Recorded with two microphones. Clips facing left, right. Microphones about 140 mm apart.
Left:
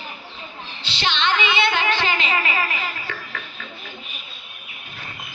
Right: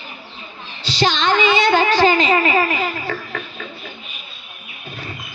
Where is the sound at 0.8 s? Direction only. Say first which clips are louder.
Right 6 dB; 40° right (ahead or behind).